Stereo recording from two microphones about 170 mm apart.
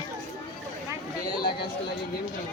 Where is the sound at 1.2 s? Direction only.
25° left (ahead or behind).